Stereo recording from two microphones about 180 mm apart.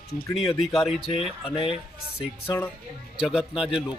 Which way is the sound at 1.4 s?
30° left (ahead or behind).